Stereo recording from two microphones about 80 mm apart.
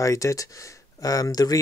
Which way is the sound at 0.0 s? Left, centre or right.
Left.